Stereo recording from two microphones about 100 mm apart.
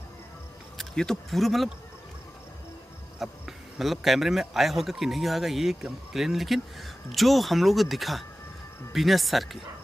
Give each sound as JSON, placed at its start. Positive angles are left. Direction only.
{"t": 0.7, "sound": "speech", "side_deg": 5}
{"t": 3.2, "sound": "speech", "side_deg": -5}